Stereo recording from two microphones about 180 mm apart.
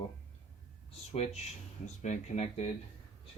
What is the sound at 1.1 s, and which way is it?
Speech, 35° left (ahead or behind).